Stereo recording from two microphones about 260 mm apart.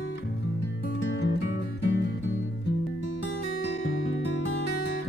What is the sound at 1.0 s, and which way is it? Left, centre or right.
Music, left.